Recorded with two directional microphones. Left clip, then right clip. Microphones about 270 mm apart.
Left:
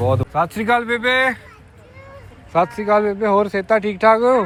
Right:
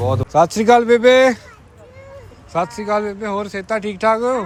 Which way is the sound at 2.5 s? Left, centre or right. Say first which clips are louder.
Left 3 dB; centre.